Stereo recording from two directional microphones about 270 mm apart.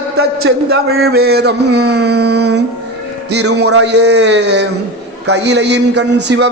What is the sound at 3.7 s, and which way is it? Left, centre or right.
A man's voice, right.